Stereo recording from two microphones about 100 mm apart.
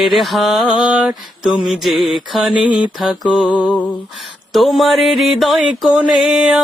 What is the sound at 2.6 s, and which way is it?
Mantra, 50° left (ahead or behind).